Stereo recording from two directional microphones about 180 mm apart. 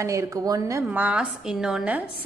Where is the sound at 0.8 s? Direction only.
10° right (ahead or behind).